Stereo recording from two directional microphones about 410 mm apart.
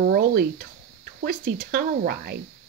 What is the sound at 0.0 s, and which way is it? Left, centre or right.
Speech, right.